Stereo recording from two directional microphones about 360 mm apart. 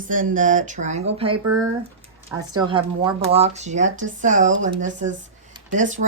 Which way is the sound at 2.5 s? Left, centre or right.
Centre.